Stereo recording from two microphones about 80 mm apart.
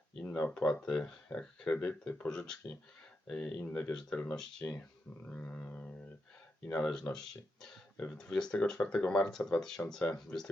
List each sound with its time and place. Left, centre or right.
0.2 s speech: centre
1.7 s speech: left
3.6 s speech: centre
3.9 s speech: centre
4.6 s speech: left
5.2 s speech: centre
7.1 s speech: left
8.2 s speech: centre